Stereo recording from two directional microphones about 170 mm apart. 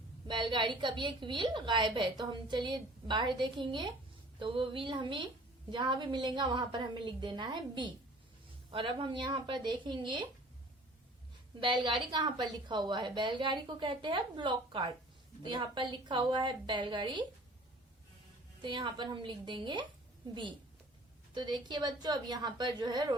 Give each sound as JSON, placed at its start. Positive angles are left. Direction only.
{"t": 0.3, "sound": "a woman's voice", "side_deg": -25}
{"t": 11.6, "sound": "a woman's voice", "side_deg": -30}
{"t": 18.6, "sound": "a woman's voice", "side_deg": -30}
{"t": 21.3, "sound": "a woman's voice", "side_deg": -25}